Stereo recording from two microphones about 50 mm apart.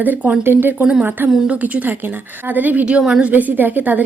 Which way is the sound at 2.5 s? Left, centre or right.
Right.